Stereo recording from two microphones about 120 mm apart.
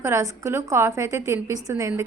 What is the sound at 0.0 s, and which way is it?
A woman's voice, 25° right (ahead or behind).